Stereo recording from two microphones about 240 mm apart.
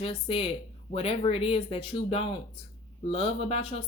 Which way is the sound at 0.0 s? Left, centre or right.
Left.